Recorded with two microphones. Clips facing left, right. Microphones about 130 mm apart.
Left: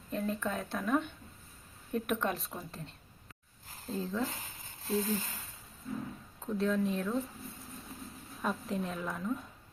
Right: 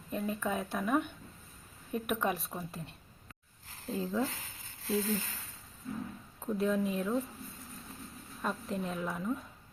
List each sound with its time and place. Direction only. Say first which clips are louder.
0.1 s a woman's voice: even; 5° right (ahead or behind)
3.9 s speech: right 2 dB; 10° right (ahead or behind)
4.9 s speech: even; 15° left (ahead or behind)
6.4 s a woman's voice: even; 5° right (ahead or behind)
8.4 s a woman's voice: left 1 dB; centre (ahead or behind)